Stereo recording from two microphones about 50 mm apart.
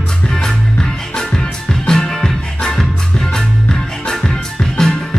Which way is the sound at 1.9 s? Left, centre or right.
Centre.